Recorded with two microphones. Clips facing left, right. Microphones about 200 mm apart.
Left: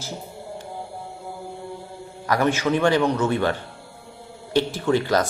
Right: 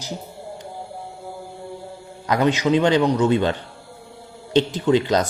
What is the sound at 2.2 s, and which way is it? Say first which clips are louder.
A man's voice: right 2 dB; 20° right (ahead or behind).